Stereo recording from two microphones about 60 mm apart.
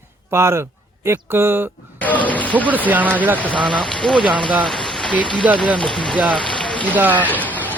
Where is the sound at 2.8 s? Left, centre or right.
Right.